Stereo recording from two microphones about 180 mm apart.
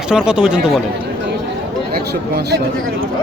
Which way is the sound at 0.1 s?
5° right (ahead or behind).